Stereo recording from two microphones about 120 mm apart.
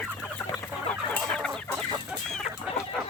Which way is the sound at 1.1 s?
5° left (ahead or behind).